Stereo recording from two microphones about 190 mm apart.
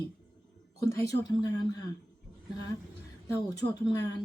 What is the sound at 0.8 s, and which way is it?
Speech, 15° left (ahead or behind).